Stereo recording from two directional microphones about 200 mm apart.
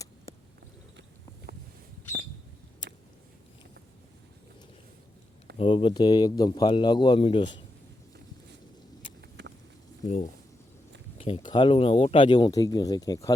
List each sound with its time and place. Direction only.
5.5 s speech: 25° left (ahead or behind)
11.2 s speech: 25° left (ahead or behind)